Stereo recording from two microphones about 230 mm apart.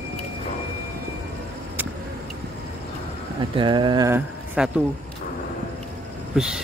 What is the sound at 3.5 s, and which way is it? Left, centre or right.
Speech, centre.